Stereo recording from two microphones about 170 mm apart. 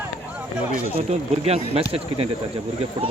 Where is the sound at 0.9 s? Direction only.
35° right (ahead or behind).